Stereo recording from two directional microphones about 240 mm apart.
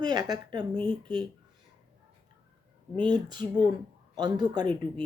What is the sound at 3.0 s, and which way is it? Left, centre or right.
Speech, centre.